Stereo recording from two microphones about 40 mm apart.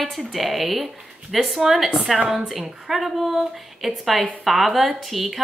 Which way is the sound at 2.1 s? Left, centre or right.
Centre.